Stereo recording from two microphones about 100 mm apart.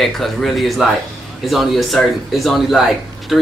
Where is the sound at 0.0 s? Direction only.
Centre (ahead or behind).